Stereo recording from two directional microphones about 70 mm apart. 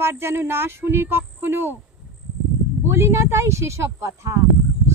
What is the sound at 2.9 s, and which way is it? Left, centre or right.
Speech, right.